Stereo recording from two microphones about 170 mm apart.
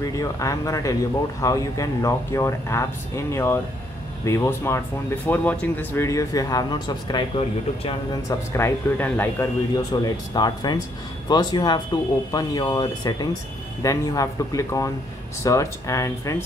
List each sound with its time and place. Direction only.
0.1 s speech: 20° left (ahead or behind)
8.3 s speech: 15° left (ahead or behind)